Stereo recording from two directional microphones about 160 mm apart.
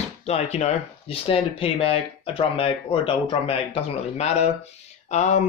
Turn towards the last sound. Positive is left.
turn(degrees=45)  # may be behind; listen again after turning